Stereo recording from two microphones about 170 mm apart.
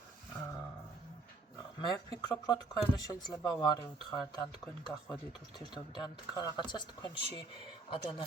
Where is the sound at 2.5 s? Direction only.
20° left (ahead or behind).